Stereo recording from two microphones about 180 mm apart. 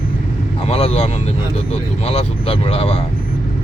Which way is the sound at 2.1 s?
35° left (ahead or behind).